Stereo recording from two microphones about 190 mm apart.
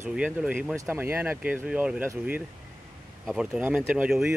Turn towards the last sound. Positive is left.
turn(degrees=-5)  # may be behind; listen again after turning